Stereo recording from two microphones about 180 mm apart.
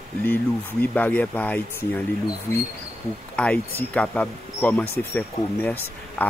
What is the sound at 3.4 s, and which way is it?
Speech, 5° left (ahead or behind).